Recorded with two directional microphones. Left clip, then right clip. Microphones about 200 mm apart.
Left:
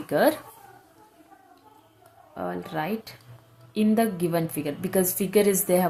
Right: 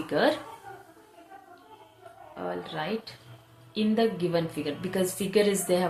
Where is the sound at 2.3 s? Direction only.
60° left (ahead or behind).